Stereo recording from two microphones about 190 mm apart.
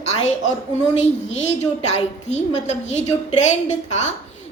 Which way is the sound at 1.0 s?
35° left (ahead or behind).